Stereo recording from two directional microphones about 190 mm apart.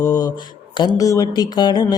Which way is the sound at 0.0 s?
20° left (ahead or behind).